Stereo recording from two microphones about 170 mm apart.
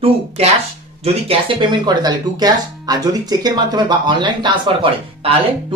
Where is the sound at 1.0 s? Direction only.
35° right (ahead or behind).